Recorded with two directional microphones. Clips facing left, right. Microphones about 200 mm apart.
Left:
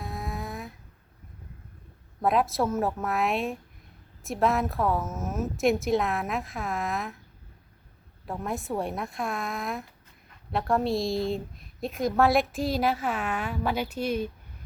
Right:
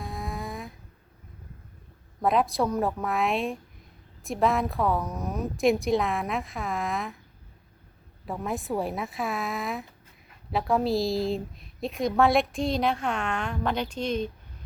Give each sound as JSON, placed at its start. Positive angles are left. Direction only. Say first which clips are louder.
{"t": 0.0, "sound": "a sound", "louder": "even", "side_deg": 0}
{"t": 2.2, "sound": "a woman's voice", "louder": "even", "side_deg": 0}
{"t": 8.3, "sound": "a woman's voice", "louder": "right 1 dB", "side_deg": 0}